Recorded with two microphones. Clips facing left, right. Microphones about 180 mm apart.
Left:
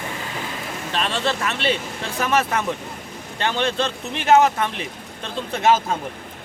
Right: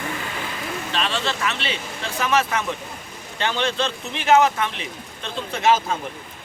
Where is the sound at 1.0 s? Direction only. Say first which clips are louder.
Left 3 dB; 50° left (ahead or behind).